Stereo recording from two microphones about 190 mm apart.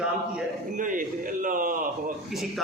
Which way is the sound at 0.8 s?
45° right (ahead or behind).